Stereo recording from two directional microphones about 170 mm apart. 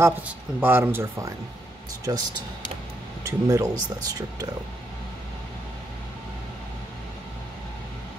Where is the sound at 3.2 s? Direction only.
20° right (ahead or behind).